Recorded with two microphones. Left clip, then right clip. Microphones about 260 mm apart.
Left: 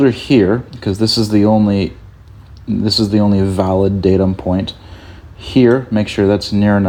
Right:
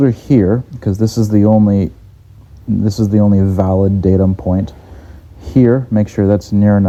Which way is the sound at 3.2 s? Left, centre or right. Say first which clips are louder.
Even; centre.